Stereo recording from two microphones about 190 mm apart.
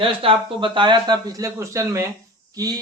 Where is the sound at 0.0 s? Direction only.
25° right (ahead or behind).